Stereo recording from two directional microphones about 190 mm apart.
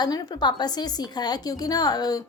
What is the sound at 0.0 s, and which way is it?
A woman's voice, 20° left (ahead or behind).